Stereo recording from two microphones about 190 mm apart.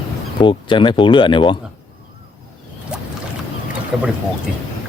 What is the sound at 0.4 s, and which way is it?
Speech, 25° left (ahead or behind).